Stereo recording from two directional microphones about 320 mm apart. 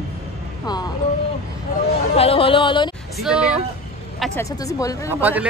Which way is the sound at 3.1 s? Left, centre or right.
Centre.